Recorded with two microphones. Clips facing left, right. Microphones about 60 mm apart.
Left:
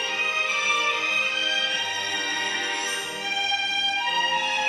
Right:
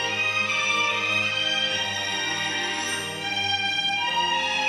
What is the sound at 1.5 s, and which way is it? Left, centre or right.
Music, centre.